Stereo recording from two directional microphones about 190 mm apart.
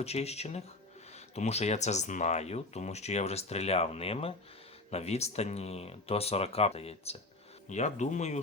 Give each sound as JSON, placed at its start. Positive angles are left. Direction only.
{"t": 0.0, "sound": "speech", "side_deg": 35}